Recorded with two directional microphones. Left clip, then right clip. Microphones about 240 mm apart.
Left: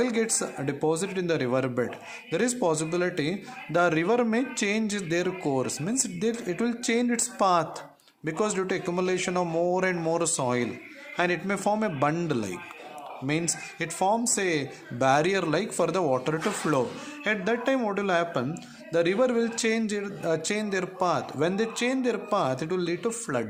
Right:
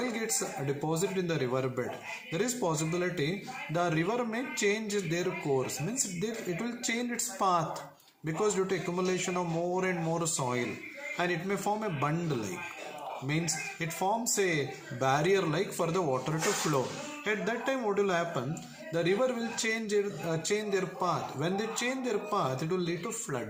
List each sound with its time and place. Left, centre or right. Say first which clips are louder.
0.0 s a man's voice: left 7 dB; left